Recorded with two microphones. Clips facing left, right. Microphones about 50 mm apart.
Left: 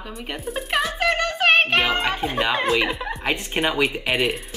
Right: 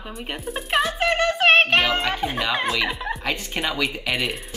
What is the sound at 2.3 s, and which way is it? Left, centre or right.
Speech, centre.